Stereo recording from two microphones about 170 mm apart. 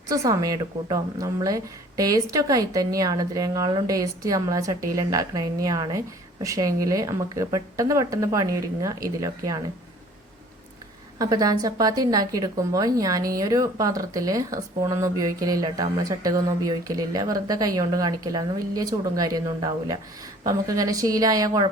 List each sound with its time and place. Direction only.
0.1 s a woman's voice: 20° right (ahead or behind)
11.2 s a woman's voice: 20° right (ahead or behind)
20.4 s a woman's voice: 20° right (ahead or behind)